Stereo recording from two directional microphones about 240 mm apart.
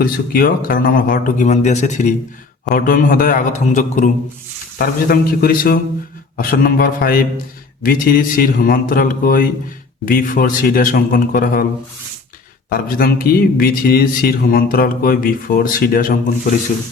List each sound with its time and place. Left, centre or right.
0.0 s speech: left
12.7 s speech: left